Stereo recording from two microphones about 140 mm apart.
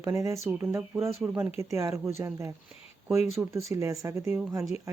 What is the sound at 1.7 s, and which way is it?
Speech, 20° right (ahead or behind).